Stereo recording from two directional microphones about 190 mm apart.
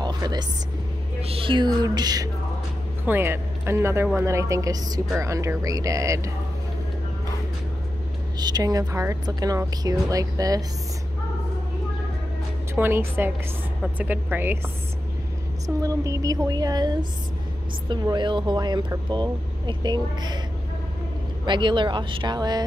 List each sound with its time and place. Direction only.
0.0 s a sound: 20° right (ahead or behind)
1.2 s a woman's voice: 30° right (ahead or behind)
8.4 s speech: 20° right (ahead or behind)
12.7 s a woman's voice: 10° right (ahead or behind)
15.6 s speech: 15° right (ahead or behind)
21.5 s speech: 25° right (ahead or behind)